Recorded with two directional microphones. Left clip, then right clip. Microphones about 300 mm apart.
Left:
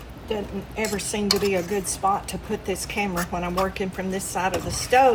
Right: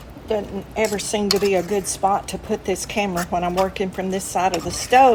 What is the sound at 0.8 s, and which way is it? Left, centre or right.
A woman's voice, right.